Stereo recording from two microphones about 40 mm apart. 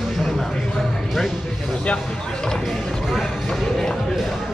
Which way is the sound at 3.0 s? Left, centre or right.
Centre.